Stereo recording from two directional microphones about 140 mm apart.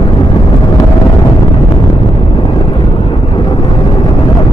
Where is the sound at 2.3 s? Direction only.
35° left (ahead or behind).